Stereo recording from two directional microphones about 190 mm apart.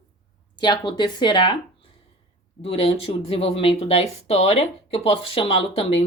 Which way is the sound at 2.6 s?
30° left (ahead or behind).